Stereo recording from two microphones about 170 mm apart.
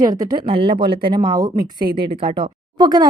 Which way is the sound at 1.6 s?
60° right (ahead or behind).